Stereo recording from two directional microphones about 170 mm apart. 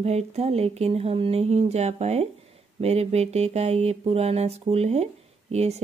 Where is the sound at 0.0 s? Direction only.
40° right (ahead or behind).